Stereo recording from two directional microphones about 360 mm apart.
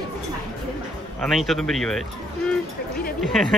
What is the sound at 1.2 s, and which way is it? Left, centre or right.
Speech, centre.